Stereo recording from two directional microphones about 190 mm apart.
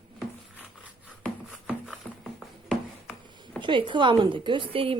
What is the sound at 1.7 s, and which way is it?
Music, centre (ahead or behind).